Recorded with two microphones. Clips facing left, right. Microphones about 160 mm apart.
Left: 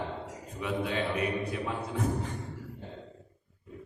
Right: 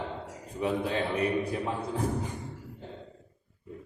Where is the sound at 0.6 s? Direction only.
35° right (ahead or behind).